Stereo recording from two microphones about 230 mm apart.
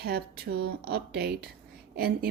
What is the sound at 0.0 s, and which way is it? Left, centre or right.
A woman's voice, right.